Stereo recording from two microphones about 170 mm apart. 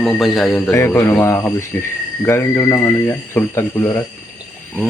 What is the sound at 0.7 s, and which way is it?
Speech, 15° left (ahead or behind).